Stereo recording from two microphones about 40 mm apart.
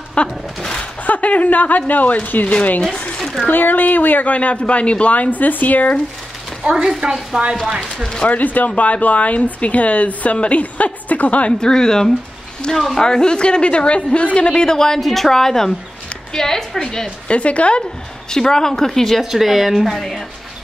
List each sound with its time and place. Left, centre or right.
0.2 s a woman's voice: left
0.6 s a woman's voice: centre
1.0 s speech: left
2.9 s speech: left
3.2 s a sound: centre
3.4 s speech: left
6.6 s speech: right
8.3 s speech: left
11.6 s a woman's voice: centre
13.0 s a woman's voice: centre
15.0 s a woman's voice: centre
17.3 s a woman's voice: left
18.3 s a woman's voice: centre
19.2 s a woman's voice: centre